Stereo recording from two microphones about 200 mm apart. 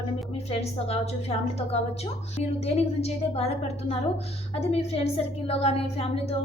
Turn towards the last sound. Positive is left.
turn(degrees=30)  # may be behind; listen again after turning